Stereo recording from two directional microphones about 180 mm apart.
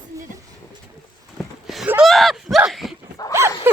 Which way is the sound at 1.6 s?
5° right (ahead or behind).